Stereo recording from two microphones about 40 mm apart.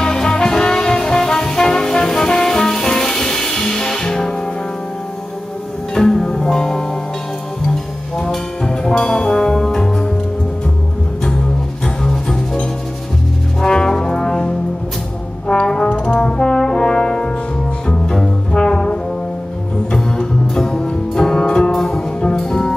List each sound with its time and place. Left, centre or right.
0.0 s brass instrument: centre
5.9 s music: centre
8.2 s music: centre
9.0 s brass instrument: centre
12.0 s music: centre
13.6 s brass instrument: centre
17.8 s double bass: centre
18.7 s brass instrument: left
19.9 s music: centre